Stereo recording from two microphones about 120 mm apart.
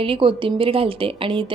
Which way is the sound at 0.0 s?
45° right (ahead or behind).